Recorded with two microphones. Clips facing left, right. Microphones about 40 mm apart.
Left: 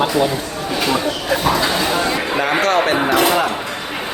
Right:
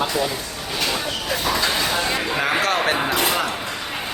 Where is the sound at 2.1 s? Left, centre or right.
Centre.